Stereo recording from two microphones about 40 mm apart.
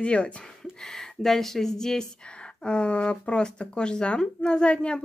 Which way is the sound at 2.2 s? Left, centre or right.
Left.